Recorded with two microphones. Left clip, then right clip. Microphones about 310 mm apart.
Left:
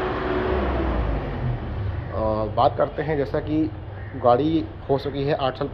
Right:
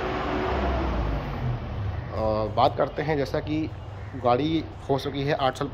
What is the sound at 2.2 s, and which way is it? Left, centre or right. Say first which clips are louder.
Speech: left 2 dB; centre.